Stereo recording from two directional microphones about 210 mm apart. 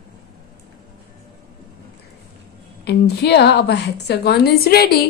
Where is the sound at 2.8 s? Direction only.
50° left (ahead or behind).